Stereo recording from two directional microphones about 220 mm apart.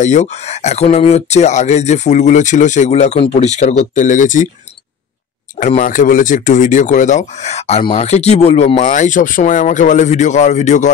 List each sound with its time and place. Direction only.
0.0 s speech: 30° left (ahead or behind)
5.6 s speech: 35° left (ahead or behind)